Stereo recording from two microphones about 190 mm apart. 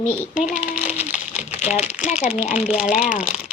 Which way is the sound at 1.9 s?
5° right (ahead or behind).